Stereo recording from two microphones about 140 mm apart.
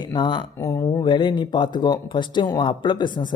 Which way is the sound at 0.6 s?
20° left (ahead or behind).